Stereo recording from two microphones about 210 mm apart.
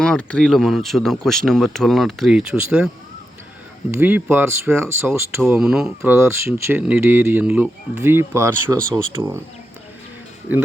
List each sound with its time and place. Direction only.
0.0 s speech: 5° left (ahead or behind)
3.9 s speech: 10° right (ahead or behind)